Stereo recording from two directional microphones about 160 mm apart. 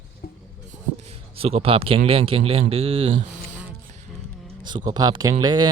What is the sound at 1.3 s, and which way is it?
Speech, 40° right (ahead or behind).